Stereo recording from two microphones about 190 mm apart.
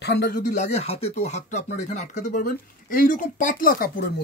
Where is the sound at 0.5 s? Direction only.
35° left (ahead or behind).